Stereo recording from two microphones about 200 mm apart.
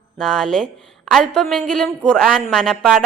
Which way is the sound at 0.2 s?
5° left (ahead or behind).